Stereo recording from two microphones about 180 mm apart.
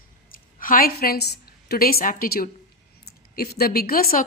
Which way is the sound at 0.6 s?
55° left (ahead or behind).